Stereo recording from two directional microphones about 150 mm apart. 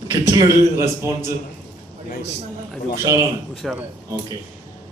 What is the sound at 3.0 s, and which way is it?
Speech, 20° right (ahead or behind).